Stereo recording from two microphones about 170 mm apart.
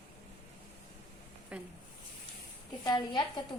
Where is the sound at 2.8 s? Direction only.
25° left (ahead or behind).